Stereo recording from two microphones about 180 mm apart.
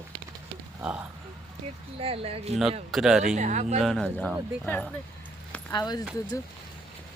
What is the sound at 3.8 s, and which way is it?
Speech, centre (ahead or behind).